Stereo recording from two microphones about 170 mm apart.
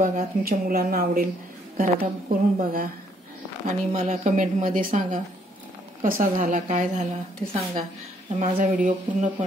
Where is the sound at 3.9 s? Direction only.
45° right (ahead or behind).